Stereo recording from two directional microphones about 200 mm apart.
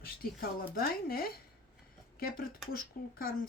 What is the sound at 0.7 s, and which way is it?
Speech, 50° left (ahead or behind).